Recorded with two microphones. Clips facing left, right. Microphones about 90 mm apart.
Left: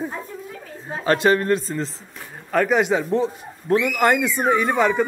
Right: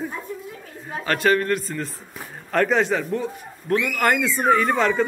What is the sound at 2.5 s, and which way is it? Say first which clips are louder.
Speech: left 1 dB; 10° left (ahead or behind).